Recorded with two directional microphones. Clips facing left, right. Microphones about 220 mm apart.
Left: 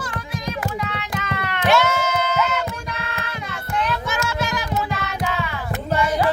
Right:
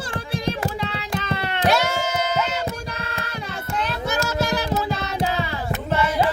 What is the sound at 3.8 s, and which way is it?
Child singing, 35° right (ahead or behind).